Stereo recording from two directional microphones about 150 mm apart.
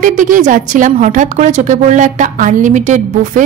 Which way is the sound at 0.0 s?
60° right (ahead or behind).